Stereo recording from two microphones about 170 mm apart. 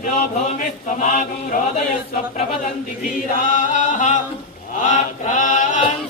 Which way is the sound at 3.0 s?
50° left (ahead or behind).